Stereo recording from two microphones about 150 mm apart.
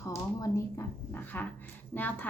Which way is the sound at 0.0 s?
20° left (ahead or behind).